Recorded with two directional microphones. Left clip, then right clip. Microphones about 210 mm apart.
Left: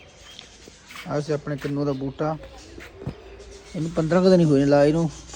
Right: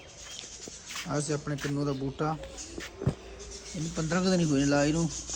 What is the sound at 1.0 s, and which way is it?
Speech, 15° right (ahead or behind).